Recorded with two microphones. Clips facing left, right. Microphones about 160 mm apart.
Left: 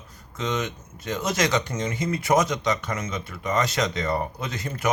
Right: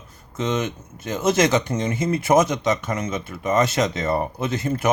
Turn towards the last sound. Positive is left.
turn(degrees=-25)  # may be behind; listen again after turning